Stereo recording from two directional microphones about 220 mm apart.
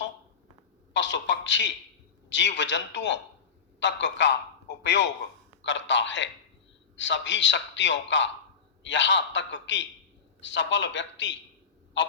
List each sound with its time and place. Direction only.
0.9 s a man's voice: 55° left (ahead or behind)